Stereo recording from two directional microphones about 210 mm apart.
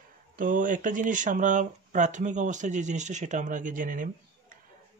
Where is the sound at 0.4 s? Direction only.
40° right (ahead or behind).